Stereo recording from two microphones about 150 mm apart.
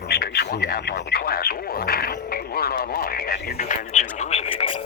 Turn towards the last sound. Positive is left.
turn(degrees=35)  # may be behind; listen again after turning